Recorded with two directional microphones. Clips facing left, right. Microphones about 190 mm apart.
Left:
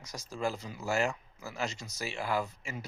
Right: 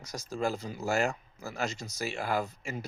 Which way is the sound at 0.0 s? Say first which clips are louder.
Right 2 dB; 40° right (ahead or behind).